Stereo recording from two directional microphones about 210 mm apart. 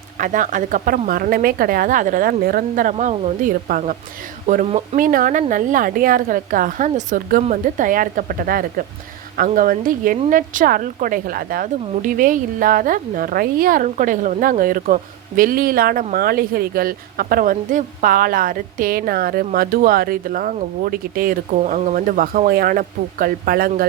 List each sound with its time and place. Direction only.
0.2 s a woman's voice: 40° right (ahead or behind)